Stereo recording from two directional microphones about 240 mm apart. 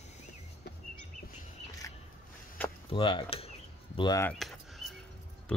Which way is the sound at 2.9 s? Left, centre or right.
Left.